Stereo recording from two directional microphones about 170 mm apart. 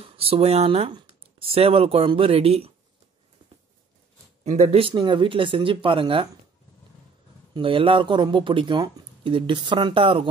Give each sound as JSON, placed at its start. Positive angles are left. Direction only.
{"t": 0.0, "sound": "speech", "side_deg": -35}
{"t": 4.5, "sound": "speech", "side_deg": -40}
{"t": 7.5, "sound": "speech", "side_deg": -30}